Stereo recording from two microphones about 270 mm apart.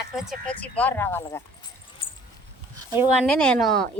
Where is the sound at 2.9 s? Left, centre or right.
Centre.